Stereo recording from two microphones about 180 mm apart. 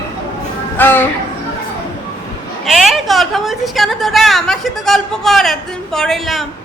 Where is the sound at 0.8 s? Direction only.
10° left (ahead or behind).